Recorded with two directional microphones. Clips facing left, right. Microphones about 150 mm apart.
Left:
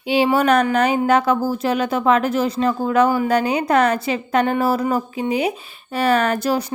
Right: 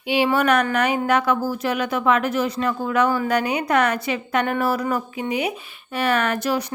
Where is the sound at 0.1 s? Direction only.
30° left (ahead or behind).